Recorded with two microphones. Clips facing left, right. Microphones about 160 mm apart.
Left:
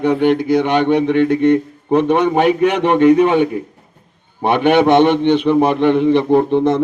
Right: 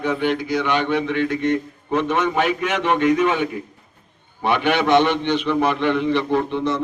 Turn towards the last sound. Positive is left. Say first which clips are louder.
# left 8 dB
turn(degrees=50)  # may be behind; listen again after turning